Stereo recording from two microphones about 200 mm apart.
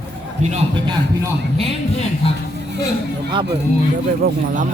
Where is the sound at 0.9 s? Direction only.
25° right (ahead or behind).